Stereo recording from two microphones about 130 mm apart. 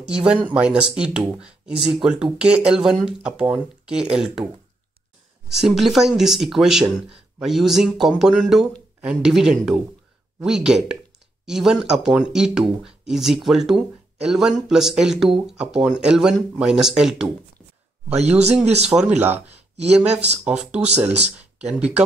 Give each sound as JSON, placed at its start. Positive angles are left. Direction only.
{"t": 0.0, "sound": "speech", "side_deg": -5}
{"t": 5.5, "sound": "speech", "side_deg": -5}
{"t": 18.1, "sound": "speech", "side_deg": -55}
{"t": 18.9, "sound": "speech", "side_deg": -5}
{"t": 19.5, "sound": "a sound", "side_deg": -55}
{"t": 20.0, "sound": "speech", "side_deg": -5}